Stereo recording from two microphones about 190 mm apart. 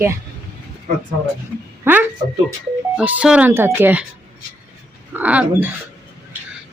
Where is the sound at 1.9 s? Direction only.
10° right (ahead or behind).